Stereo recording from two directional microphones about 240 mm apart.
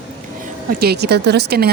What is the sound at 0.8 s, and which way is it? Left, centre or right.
Speech, right.